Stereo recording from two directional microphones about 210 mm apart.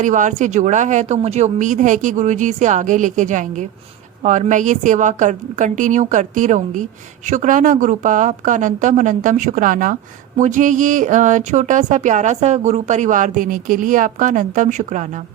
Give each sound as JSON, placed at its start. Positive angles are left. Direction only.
{"t": 0.0, "sound": "a woman's voice", "side_deg": -35}